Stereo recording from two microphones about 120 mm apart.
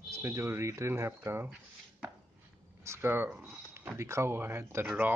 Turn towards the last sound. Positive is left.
turn(degrees=-20)  # may be behind; listen again after turning